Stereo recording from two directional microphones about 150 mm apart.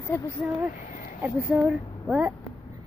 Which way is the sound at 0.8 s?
65° left (ahead or behind).